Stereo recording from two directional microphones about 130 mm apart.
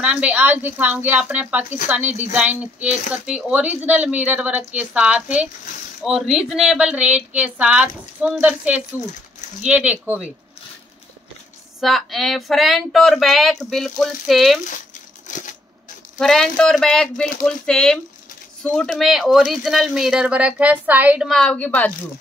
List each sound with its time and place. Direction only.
0.0 s speech: 10° right (ahead or behind)
11.8 s speech: centre (ahead or behind)
15.3 s a sound: 70° left (ahead or behind)
16.2 s speech: 5° left (ahead or behind); by 21.3 s 10° right (ahead or behind)
21.3 s a woman's voice: 5° left (ahead or behind)